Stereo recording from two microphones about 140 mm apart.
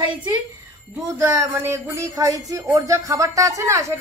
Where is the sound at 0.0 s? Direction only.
35° right (ahead or behind).